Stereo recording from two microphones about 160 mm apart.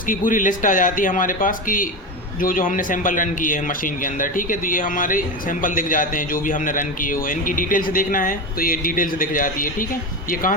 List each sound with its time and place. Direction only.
0.1 s a man's voice: 55° left (ahead or behind)